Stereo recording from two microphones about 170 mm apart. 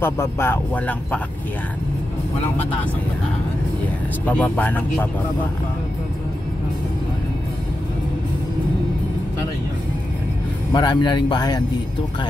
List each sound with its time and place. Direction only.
0.0 s speech: 15° left (ahead or behind)
4.3 s speech: 10° left (ahead or behind)
10.7 s speech: 25° left (ahead or behind)